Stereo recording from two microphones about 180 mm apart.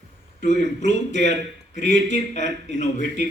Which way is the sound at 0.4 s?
40° left (ahead or behind).